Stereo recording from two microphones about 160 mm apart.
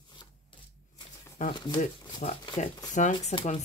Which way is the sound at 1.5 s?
25° left (ahead or behind).